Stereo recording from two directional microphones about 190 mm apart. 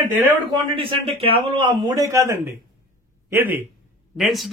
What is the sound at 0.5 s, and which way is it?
Speech, 30° right (ahead or behind).